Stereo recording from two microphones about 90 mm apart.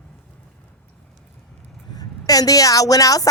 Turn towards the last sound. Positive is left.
turn(degrees=40)  # may be behind; listen again after turning